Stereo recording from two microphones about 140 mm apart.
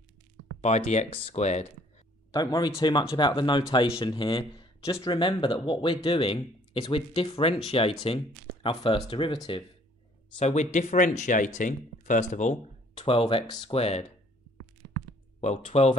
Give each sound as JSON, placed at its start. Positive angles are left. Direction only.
{"t": 0.6, "sound": "speech", "side_deg": 50}
{"t": 2.3, "sound": "speech", "side_deg": 30}
{"t": 10.4, "sound": "speech", "side_deg": 55}
{"t": 12.9, "sound": "speech", "side_deg": 40}
{"t": 15.4, "sound": "speech", "side_deg": 50}